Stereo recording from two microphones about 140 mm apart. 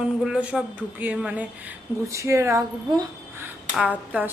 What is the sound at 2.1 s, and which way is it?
Speech, 20° right (ahead or behind).